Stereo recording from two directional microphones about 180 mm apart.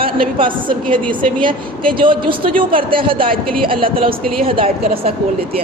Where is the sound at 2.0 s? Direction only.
30° right (ahead or behind).